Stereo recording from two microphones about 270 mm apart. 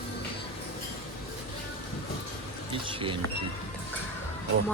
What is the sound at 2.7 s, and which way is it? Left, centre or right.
Speech, centre.